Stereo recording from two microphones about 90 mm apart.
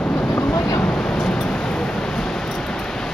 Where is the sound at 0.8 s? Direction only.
5° left (ahead or behind).